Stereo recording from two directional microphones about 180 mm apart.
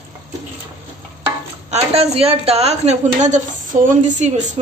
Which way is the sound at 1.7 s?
35° right (ahead or behind).